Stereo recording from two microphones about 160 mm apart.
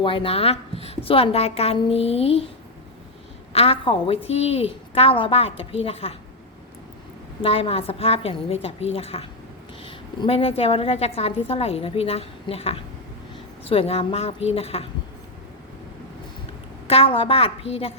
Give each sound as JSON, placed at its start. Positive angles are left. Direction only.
{"t": 0.0, "sound": "a woman's voice", "side_deg": 35}
{"t": 3.5, "sound": "a woman's voice", "side_deg": 35}
{"t": 7.4, "sound": "a woman's voice", "side_deg": 35}
{"t": 16.8, "sound": "a woman's voice", "side_deg": 35}